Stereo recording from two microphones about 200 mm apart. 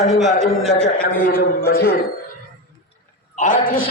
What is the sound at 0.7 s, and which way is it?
Speech, 35° left (ahead or behind).